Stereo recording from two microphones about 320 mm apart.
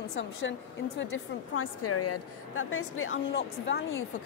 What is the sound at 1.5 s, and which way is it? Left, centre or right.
A woman's voice, left.